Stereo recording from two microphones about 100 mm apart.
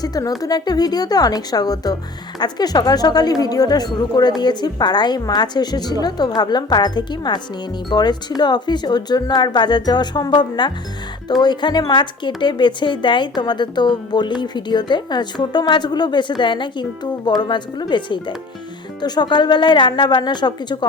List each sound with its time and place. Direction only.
0.0 s a woman's voice: 40° left (ahead or behind)